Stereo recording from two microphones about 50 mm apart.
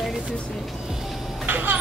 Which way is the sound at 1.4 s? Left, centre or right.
Right.